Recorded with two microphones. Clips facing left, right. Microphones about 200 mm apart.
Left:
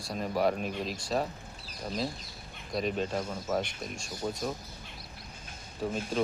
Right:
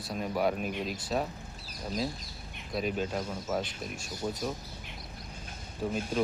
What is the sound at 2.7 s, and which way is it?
Speech, centre (ahead or behind).